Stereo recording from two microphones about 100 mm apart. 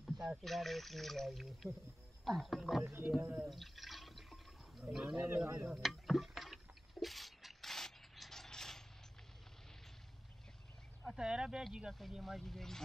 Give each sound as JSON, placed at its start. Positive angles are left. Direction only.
{"t": 0.0, "sound": "speech", "side_deg": 0}
{"t": 2.8, "sound": "a man's voice", "side_deg": -20}
{"t": 3.4, "sound": "drip", "side_deg": 0}
{"t": 4.8, "sound": "speech", "side_deg": -5}
{"t": 5.1, "sound": "a man's voice", "side_deg": -20}
{"t": 5.7, "sound": "a sound", "side_deg": 0}
{"t": 11.1, "sound": "speech", "side_deg": -10}